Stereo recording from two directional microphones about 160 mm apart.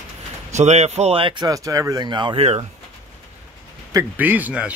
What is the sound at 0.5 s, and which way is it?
Speech, 45° right (ahead or behind).